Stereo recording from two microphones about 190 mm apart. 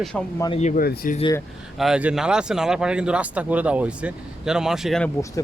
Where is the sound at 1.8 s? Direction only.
5° right (ahead or behind).